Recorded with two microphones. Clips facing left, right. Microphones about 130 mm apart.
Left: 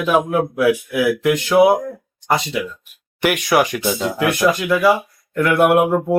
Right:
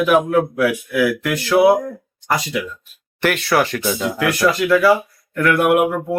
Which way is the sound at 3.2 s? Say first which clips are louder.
Left 1 dB; 15° left (ahead or behind).